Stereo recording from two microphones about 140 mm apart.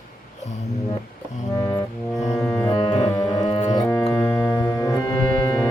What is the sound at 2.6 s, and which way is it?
Music, 20° left (ahead or behind).